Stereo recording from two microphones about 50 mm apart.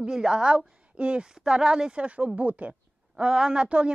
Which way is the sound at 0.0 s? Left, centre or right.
Centre.